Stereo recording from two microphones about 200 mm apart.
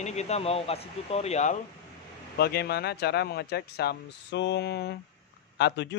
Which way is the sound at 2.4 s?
55° left (ahead or behind).